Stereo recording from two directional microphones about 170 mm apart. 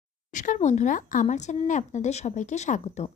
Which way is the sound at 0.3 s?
50° left (ahead or behind).